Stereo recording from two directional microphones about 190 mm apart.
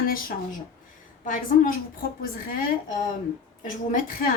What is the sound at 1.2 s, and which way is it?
A woman's voice, 45° left (ahead or behind).